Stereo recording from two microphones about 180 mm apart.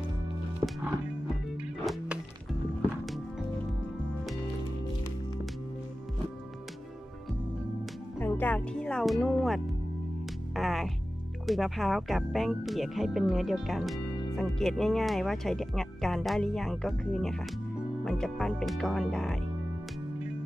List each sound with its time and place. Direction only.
8.2 s music: 10° left (ahead or behind)
11.4 s speech: centre (ahead or behind)